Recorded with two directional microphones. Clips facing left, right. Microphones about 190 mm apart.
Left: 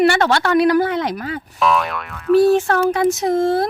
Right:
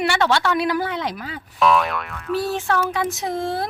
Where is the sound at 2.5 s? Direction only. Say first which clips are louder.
Left 6 dB; 45° left (ahead or behind).